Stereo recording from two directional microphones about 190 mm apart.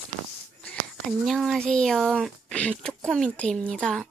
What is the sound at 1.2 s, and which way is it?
Speech, centre (ahead or behind).